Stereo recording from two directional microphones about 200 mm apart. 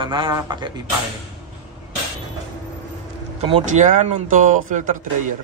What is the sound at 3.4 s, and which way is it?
Speech, 35° right (ahead or behind).